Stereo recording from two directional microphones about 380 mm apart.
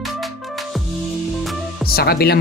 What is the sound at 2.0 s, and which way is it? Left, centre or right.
Speech, left.